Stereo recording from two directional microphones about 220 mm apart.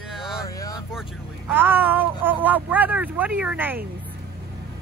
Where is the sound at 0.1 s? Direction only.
Centre (ahead or behind).